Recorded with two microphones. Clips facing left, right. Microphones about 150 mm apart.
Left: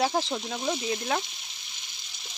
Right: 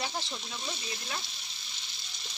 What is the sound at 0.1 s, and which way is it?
Speech, 55° left (ahead or behind).